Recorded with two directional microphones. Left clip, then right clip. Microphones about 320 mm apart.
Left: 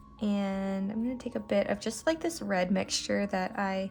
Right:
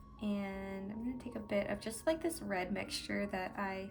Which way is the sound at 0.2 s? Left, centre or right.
Centre.